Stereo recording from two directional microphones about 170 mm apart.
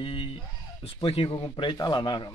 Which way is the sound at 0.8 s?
30° left (ahead or behind).